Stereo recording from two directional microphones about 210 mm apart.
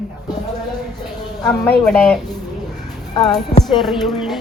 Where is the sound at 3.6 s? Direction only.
Centre (ahead or behind).